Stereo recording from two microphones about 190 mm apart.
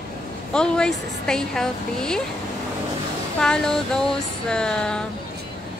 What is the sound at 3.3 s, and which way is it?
A woman's voice, 5° left (ahead or behind).